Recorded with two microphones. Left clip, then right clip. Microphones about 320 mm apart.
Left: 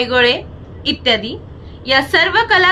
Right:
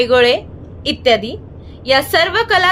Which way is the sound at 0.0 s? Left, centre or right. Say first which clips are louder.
Right 2 dB; right.